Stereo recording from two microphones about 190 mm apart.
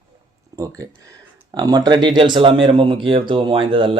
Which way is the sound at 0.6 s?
15° right (ahead or behind).